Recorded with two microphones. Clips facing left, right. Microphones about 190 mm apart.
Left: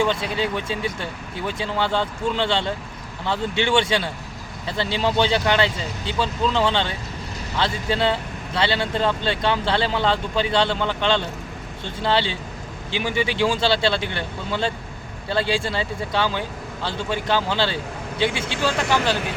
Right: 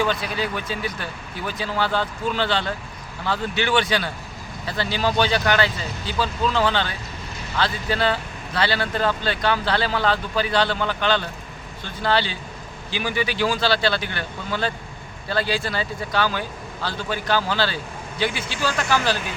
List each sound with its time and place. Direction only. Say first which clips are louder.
0.0 s speech: left 2 dB; 25° left (ahead or behind)